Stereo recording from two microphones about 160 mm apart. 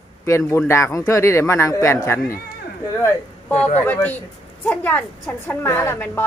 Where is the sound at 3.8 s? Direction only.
10° left (ahead or behind).